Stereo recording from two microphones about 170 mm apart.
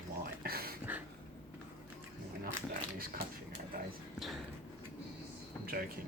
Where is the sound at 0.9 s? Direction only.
10° right (ahead or behind).